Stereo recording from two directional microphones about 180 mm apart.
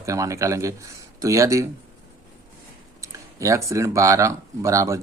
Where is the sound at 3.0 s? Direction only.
15° right (ahead or behind).